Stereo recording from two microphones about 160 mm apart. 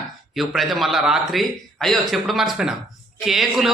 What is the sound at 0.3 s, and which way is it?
Speech, centre (ahead or behind).